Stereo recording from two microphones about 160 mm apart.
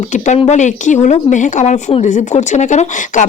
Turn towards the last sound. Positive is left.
turn(degrees=50)  # may be behind; listen again after turning